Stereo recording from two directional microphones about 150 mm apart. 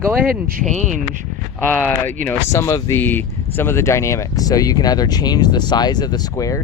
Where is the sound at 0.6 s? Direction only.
55° right (ahead or behind).